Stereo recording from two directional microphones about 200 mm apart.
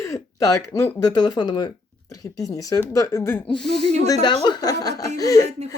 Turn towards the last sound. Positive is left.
turn(degrees=-35)  # may be behind; listen again after turning